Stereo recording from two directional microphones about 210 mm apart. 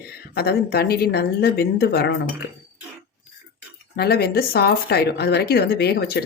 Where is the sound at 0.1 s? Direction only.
50° left (ahead or behind).